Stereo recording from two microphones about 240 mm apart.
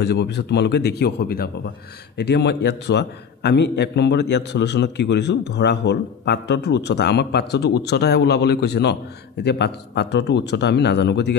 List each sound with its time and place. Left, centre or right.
0.0 s a man's voice: left